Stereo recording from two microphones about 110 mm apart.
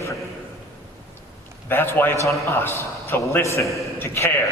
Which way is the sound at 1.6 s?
20° left (ahead or behind).